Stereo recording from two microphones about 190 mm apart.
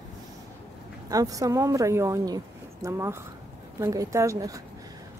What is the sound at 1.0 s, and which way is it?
Speech, 20° right (ahead or behind).